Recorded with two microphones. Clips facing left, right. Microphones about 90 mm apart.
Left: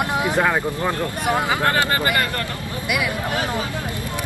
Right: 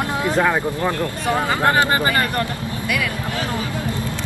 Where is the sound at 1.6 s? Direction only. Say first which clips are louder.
Right 3 dB; 25° right (ahead or behind).